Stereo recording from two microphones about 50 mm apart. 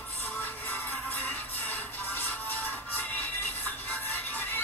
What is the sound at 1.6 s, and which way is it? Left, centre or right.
Music, left.